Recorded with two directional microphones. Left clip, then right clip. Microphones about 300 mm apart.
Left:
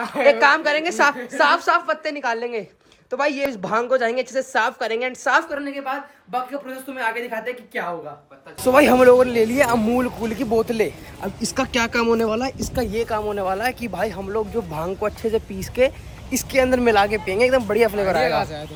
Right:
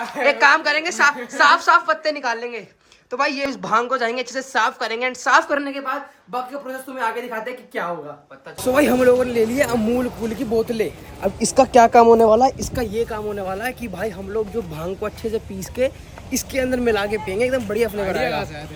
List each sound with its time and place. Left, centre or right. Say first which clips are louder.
0.3 s speech: even; centre
5.5 s a woman's voice: right 6 dB; right
8.6 s speech: left 3 dB; centre